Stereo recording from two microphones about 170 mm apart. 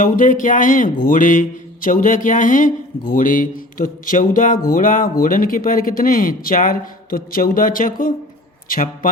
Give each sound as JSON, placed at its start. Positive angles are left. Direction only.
{"t": 0.0, "sound": "mantra", "side_deg": 50}
{"t": 3.1, "sound": "music", "side_deg": 50}
{"t": 8.7, "sound": "mantra", "side_deg": 55}